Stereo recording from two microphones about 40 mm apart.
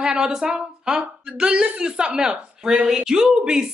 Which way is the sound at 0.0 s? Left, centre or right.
Centre.